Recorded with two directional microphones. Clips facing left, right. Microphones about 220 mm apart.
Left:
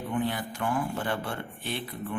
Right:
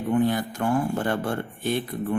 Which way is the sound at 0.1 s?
45° right (ahead or behind).